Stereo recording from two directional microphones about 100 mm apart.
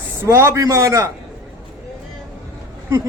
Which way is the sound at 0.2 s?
25° right (ahead or behind).